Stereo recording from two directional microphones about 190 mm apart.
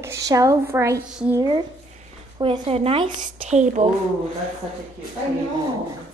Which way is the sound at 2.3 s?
25° right (ahead or behind).